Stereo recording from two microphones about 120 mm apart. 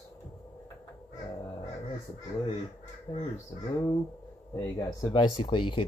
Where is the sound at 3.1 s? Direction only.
40° left (ahead or behind).